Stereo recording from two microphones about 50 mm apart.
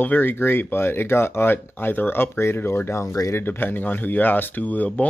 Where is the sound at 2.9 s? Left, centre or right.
Left.